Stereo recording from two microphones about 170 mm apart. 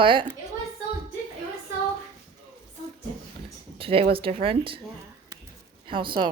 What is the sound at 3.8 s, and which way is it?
Speech, 35° right (ahead or behind).